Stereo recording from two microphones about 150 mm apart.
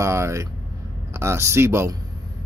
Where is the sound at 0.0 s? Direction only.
20° right (ahead or behind).